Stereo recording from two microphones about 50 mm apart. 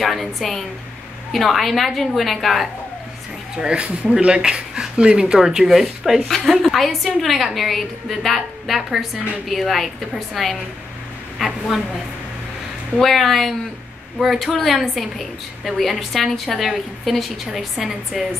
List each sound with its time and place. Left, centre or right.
0.0 s a woman's voice: centre
3.5 s a woman's voice: centre
12.9 s a woman's voice: centre